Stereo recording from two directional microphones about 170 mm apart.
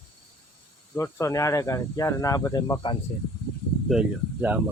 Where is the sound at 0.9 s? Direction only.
15° left (ahead or behind).